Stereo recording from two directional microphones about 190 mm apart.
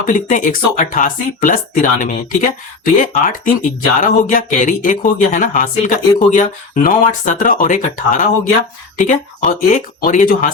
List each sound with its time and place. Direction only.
0.1 s speech: 45° left (ahead or behind)